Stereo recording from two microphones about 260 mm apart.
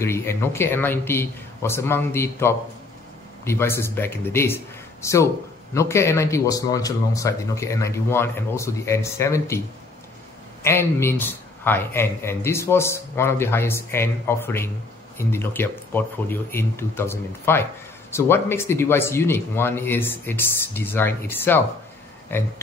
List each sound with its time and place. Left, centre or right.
0.0 s speech: centre
10.6 s speech: centre